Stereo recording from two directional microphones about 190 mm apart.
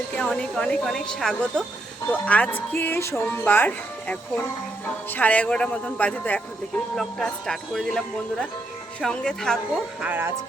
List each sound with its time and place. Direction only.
0.1 s speech: 5° left (ahead or behind)
10.0 s speech: 10° right (ahead or behind)